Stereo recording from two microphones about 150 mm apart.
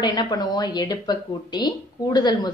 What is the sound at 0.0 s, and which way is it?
Speech, 25° left (ahead or behind).